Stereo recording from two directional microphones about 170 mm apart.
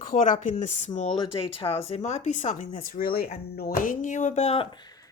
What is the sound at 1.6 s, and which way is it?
Speech, 35° left (ahead or behind).